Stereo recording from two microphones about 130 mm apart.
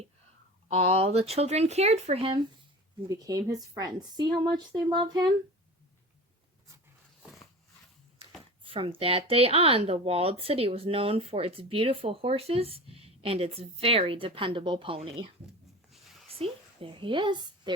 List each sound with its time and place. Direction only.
0.7 s speech: 50° right (ahead or behind)
3.1 s speech: 30° right (ahead or behind)
8.6 s speech: 45° right (ahead or behind)
15.9 s a sound: centre (ahead or behind)
16.3 s a woman's voice: 45° right (ahead or behind)